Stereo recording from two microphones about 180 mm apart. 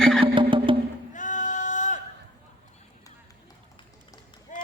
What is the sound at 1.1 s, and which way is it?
Male singing, 45° left (ahead or behind).